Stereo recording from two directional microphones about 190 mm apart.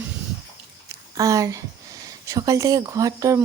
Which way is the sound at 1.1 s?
15° right (ahead or behind).